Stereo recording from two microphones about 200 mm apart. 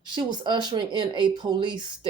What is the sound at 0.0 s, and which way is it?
Speech, 20° right (ahead or behind).